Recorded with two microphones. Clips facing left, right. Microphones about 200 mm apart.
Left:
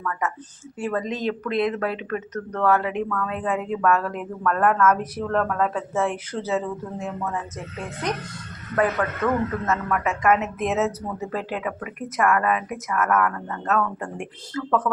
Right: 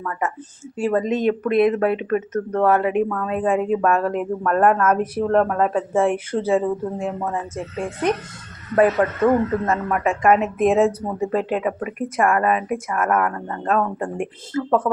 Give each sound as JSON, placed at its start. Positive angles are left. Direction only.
{"t": 0.0, "sound": "a man's voice", "side_deg": -30}